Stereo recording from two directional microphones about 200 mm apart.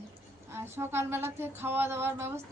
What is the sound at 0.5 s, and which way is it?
A woman's voice, 10° right (ahead or behind).